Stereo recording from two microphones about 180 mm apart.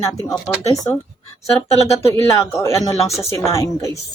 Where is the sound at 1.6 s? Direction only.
15° left (ahead or behind).